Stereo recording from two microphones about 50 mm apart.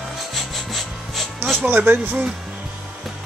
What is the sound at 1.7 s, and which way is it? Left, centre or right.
Speech, right.